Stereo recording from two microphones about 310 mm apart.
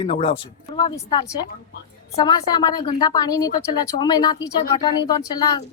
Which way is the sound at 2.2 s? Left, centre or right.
Centre.